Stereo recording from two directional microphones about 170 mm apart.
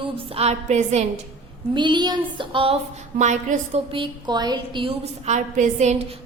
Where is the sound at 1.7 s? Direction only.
25° right (ahead or behind).